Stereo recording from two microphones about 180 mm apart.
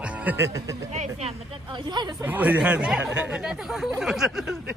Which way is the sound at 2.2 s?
10° right (ahead or behind).